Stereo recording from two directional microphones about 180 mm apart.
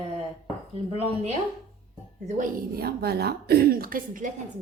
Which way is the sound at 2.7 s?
60° right (ahead or behind).